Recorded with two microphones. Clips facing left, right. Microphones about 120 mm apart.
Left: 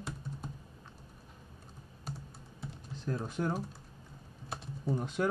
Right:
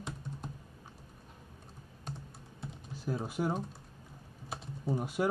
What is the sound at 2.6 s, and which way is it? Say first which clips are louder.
Typing: even; 10° right (ahead or behind).